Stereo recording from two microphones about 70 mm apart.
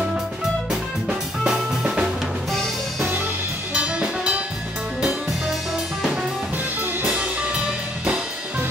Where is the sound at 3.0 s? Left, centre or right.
Right.